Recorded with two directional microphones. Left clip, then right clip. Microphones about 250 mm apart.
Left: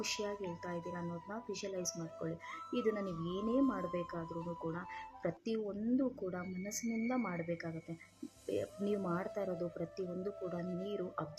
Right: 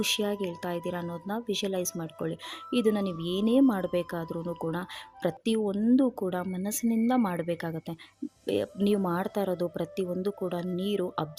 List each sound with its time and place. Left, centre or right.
0.2 s speech: right